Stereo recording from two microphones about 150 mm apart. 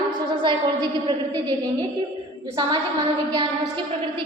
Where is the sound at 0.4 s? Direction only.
30° right (ahead or behind).